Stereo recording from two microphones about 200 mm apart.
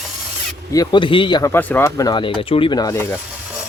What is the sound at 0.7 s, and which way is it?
Speech, 20° left (ahead or behind).